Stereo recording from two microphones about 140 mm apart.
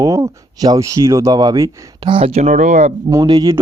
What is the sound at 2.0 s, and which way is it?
Speech, 40° right (ahead or behind).